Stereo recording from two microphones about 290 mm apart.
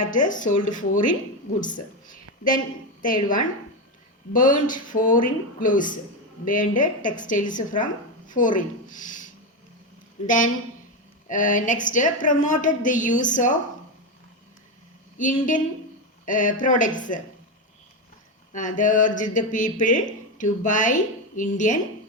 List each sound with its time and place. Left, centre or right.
0.0 s a woman's voice: left
3.0 s a woman's voice: left
15.2 s a woman's voice: left
18.5 s a woman's voice: left